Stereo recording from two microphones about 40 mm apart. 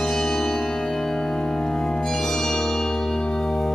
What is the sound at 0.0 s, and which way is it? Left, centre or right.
Music, centre.